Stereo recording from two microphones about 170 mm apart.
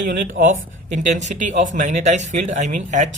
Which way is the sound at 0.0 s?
50° right (ahead or behind).